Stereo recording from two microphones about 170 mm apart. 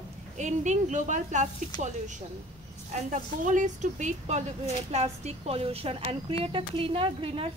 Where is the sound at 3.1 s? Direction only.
50° right (ahead or behind).